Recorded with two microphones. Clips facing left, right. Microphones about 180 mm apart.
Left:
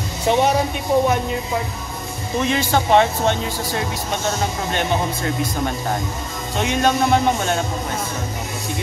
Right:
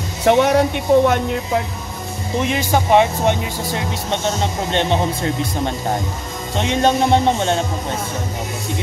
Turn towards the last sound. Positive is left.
turn(degrees=-25)  # may be behind; listen again after turning